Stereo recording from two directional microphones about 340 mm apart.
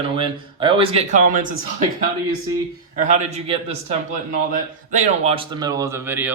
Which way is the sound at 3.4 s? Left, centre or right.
Centre.